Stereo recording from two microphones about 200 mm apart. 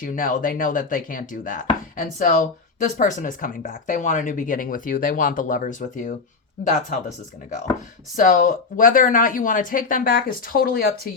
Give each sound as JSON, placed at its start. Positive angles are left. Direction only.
{"t": 0.0, "sound": "speech", "side_deg": 45}
{"t": 8.1, "sound": "speech", "side_deg": 40}